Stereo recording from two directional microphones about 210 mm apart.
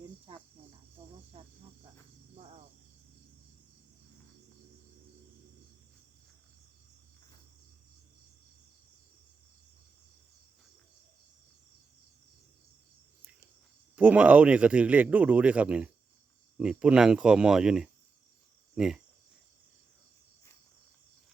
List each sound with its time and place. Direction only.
0.3 s cricket: 30° right (ahead or behind)
13.9 s a man's voice: 5° right (ahead or behind)